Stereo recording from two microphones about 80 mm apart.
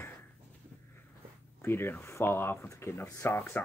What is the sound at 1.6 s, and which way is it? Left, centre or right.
Speech, left.